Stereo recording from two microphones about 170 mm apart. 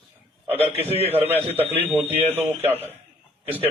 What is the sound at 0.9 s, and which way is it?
Speech, 35° right (ahead or behind).